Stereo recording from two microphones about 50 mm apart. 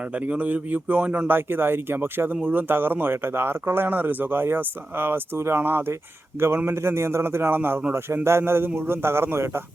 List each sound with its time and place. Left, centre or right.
0.1 s speech: right
1.3 s speech: right
3.8 s speech: right
6.7 s a man's voice: right
7.9 s a man's voice: right